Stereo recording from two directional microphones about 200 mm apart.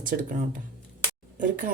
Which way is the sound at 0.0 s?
40° right (ahead or behind).